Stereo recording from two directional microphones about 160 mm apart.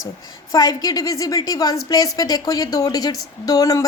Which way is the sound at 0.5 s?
25° left (ahead or behind).